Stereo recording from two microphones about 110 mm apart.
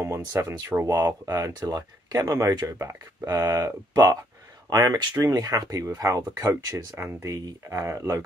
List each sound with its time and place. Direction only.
0.0 s speech: 25° right (ahead or behind)